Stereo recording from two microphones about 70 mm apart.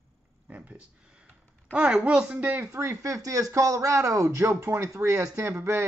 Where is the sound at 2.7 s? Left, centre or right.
Right.